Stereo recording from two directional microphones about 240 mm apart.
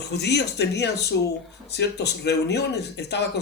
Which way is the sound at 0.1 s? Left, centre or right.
Left.